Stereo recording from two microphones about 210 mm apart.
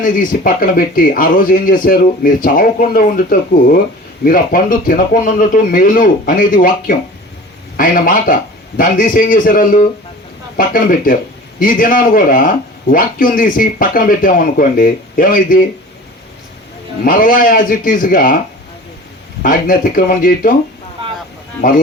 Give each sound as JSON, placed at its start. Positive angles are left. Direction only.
{"t": 0.0, "sound": "speech", "side_deg": 40}
{"t": 17.0, "sound": "speech", "side_deg": 45}
{"t": 19.4, "sound": "speech", "side_deg": 40}